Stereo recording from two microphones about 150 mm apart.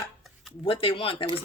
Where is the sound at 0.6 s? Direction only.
40° left (ahead or behind).